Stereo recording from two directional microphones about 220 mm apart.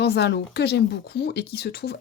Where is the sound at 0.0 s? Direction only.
50° left (ahead or behind).